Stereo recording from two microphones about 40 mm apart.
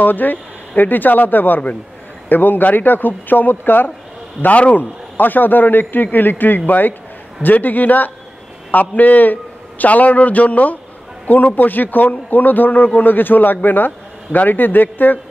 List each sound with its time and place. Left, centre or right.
0.0 s a man's voice: left